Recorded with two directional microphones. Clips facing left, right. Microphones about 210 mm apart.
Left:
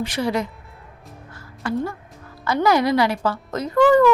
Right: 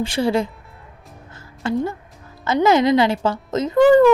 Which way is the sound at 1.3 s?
20° right (ahead or behind).